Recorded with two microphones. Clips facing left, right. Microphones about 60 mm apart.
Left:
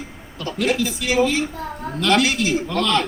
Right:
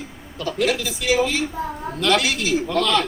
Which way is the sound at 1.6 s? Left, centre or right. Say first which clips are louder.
Right 3 dB; centre.